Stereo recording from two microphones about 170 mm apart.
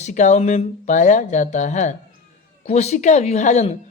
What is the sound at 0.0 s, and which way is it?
A woman's voice, 45° left (ahead or behind).